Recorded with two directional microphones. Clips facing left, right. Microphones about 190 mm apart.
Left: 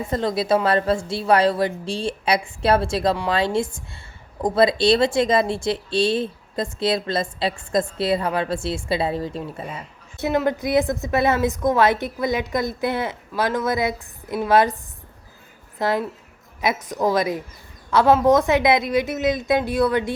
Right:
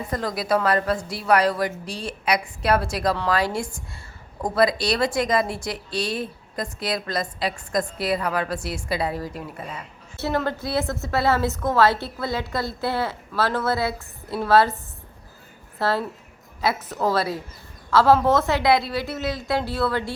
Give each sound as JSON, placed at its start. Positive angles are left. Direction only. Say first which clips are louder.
{"t": 0.1, "sound": "a woman's voice", "louder": "left 3 dB", "side_deg": 25}
{"t": 10.2, "sound": "a woman's voice", "louder": "left 4 dB", "side_deg": 15}
{"t": 15.8, "sound": "a woman's voice", "louder": "left 2 dB", "side_deg": 15}